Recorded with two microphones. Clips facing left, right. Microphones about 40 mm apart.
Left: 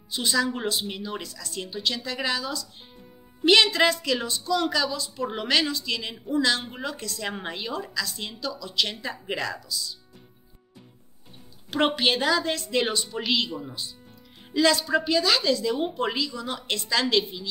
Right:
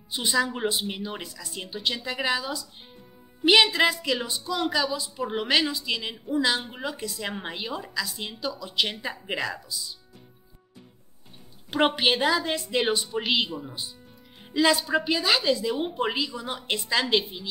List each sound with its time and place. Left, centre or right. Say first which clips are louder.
0.1 s a woman's voice: even; centre
11.7 s a woman's voice: even; centre